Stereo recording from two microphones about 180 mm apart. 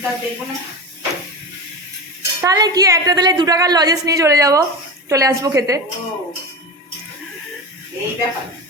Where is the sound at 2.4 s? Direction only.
20° right (ahead or behind).